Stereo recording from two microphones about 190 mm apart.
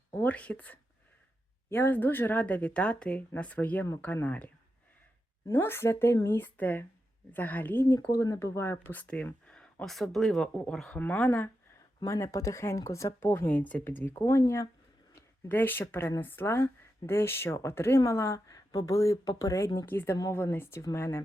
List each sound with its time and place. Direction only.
0.1 s speech: 10° left (ahead or behind)